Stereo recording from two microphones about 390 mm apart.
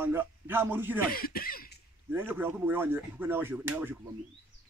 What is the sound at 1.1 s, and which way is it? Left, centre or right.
Speech, left.